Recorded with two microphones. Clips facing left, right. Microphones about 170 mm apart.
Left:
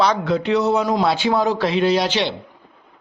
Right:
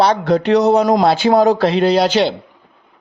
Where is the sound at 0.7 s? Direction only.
40° right (ahead or behind).